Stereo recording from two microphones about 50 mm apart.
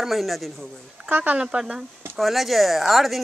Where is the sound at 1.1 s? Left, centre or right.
Right.